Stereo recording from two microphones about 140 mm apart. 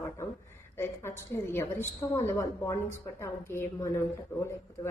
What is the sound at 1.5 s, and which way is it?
A woman's voice, 20° left (ahead or behind).